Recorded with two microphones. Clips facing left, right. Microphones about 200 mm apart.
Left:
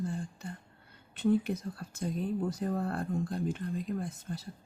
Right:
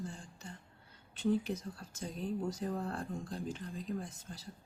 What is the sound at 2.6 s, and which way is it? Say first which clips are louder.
Speech: left 5 dB; 55° left (ahead or behind).